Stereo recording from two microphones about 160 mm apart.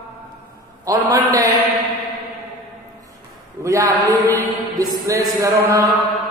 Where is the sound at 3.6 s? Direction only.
20° right (ahead or behind).